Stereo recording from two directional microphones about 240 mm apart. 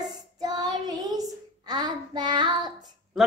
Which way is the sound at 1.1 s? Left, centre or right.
Centre.